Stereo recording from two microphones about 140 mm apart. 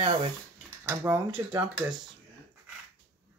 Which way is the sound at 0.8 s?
15° right (ahead or behind).